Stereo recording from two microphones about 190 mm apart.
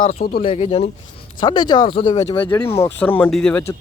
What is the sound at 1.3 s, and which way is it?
Speech, 25° left (ahead or behind).